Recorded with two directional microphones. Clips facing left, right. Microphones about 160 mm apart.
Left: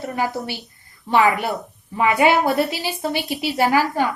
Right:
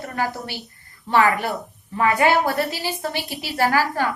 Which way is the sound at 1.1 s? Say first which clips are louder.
Left 1 dB; 15° left (ahead or behind).